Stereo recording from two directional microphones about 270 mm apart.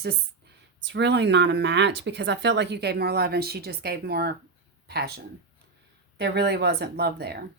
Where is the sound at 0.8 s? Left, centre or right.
Right.